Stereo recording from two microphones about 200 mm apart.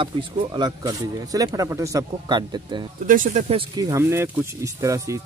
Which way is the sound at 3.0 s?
40° right (ahead or behind).